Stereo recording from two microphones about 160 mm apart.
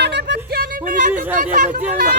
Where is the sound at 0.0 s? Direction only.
90° right.